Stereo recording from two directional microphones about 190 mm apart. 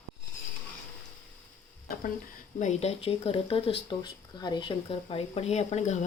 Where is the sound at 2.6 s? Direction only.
35° left (ahead or behind).